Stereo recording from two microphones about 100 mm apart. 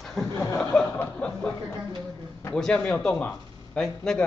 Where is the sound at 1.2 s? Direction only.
15° left (ahead or behind).